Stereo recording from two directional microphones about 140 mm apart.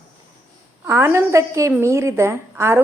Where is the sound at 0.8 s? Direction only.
20° right (ahead or behind).